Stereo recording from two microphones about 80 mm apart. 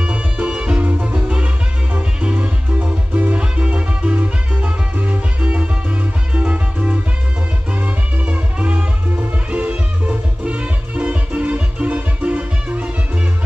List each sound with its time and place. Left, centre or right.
0.0 s music: centre